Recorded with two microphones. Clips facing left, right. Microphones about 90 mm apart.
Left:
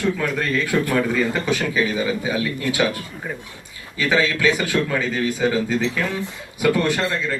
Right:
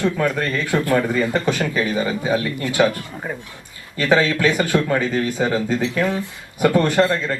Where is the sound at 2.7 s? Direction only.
45° right (ahead or behind).